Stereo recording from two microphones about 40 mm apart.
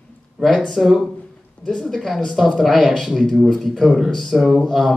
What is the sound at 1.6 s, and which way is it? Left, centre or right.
Speech, centre.